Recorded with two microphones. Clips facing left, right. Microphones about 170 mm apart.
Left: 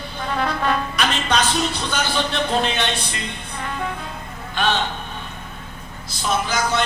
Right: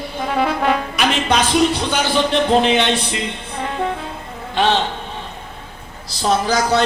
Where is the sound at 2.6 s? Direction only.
20° right (ahead or behind).